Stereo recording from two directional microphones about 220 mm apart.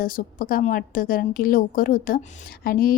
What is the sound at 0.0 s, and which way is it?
A woman's voice, 40° left (ahead or behind).